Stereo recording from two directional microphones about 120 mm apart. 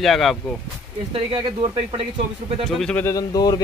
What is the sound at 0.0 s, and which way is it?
Speech, centre (ahead or behind).